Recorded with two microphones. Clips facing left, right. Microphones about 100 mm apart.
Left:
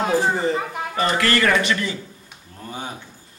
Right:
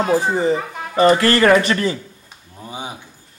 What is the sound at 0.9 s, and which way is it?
Speech, 35° right (ahead or behind).